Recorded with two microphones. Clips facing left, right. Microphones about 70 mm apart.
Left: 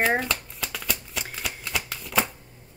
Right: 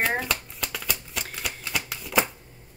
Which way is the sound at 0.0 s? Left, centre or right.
Centre.